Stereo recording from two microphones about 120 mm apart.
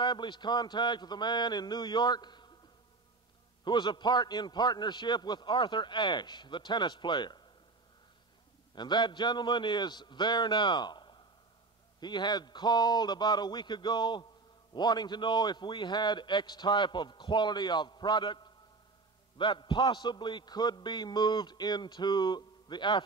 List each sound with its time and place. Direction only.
0.0 s a man's voice: 40° left (ahead or behind)
3.6 s a man's voice: 40° left (ahead or behind)
8.7 s a man's voice: 40° left (ahead or behind)